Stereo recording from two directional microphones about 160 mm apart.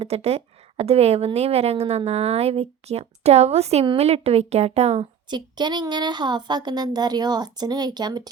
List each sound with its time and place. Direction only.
0.0 s speech: 40° right (ahead or behind)
5.3 s a woman's voice: 25° right (ahead or behind)